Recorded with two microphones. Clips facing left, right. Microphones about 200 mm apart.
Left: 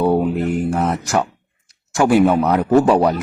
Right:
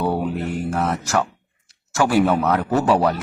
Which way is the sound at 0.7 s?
15° left (ahead or behind).